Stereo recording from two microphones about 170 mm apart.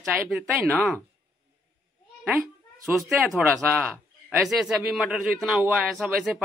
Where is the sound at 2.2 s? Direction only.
10° right (ahead or behind).